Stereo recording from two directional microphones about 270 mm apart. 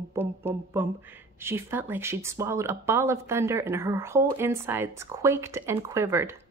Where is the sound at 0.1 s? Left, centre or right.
Centre.